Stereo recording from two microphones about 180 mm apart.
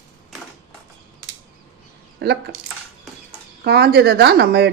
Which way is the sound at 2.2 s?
65° right (ahead or behind).